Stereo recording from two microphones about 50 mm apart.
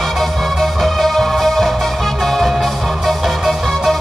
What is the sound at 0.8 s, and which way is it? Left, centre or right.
Music, centre.